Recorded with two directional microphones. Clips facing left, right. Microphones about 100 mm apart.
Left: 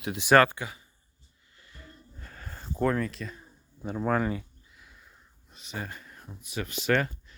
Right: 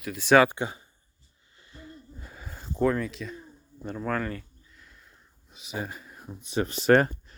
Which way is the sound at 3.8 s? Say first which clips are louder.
Left 3 dB; 10° left (ahead or behind).